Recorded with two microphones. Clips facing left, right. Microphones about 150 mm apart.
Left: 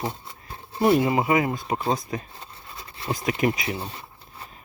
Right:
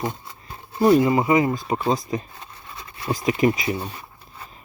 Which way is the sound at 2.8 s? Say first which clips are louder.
Right 2 dB; 30° left (ahead or behind).